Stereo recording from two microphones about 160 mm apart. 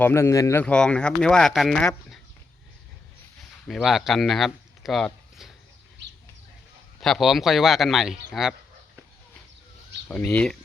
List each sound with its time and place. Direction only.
0.0 s speech: 15° left (ahead or behind)
0.6 s speech: 5° left (ahead or behind)
3.7 s speech: centre (ahead or behind)
7.0 s speech: centre (ahead or behind)
10.1 s speech: 10° left (ahead or behind)